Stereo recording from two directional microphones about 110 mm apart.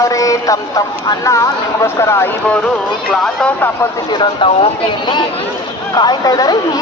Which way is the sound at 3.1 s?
10° left (ahead or behind).